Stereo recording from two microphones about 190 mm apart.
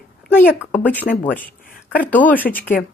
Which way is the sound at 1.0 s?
45° left (ahead or behind).